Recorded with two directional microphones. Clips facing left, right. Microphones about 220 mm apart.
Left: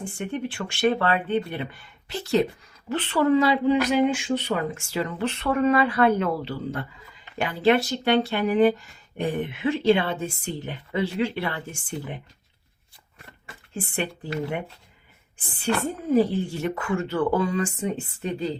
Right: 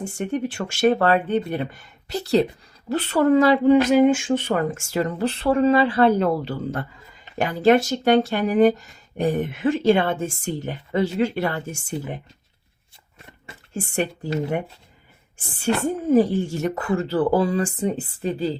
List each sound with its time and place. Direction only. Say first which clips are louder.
0.0 s speech: right 4 dB; 45° right (ahead or behind)
13.7 s speech: right 4 dB; 45° right (ahead or behind)
15.4 s speech: right 3 dB; 45° right (ahead or behind)